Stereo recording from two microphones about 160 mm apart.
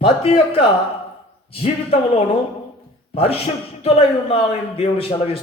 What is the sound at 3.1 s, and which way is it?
A man's voice, 35° left (ahead or behind).